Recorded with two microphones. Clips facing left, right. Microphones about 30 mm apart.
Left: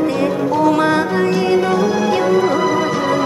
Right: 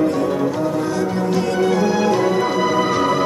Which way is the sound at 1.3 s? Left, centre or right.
Left.